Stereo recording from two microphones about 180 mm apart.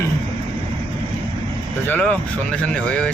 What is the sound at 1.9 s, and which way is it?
Speech, 5° left (ahead or behind).